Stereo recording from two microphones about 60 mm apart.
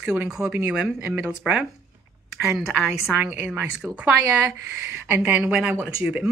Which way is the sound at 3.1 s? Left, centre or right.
Right.